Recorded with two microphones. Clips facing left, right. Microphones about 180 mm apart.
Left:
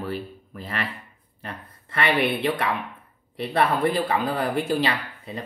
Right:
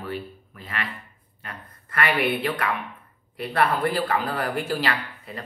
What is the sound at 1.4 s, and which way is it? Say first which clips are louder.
Speech: left 3 dB; 25° left (ahead or behind).